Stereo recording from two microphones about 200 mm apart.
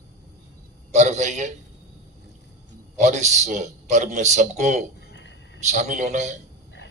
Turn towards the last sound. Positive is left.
turn(degrees=-35)  # may be behind; listen again after turning